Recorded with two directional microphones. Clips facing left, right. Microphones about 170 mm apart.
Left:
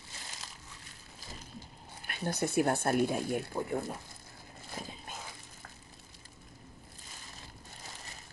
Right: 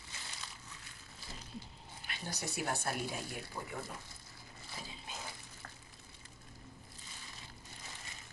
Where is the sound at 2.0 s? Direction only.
55° left (ahead or behind).